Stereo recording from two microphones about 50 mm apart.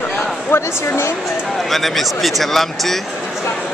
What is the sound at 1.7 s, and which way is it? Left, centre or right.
A man's voice, centre.